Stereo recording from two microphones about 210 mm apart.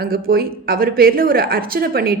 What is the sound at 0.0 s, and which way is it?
A woman's voice, 45° right (ahead or behind).